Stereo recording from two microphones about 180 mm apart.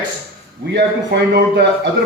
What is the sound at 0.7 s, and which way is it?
A man's voice, 70° right (ahead or behind).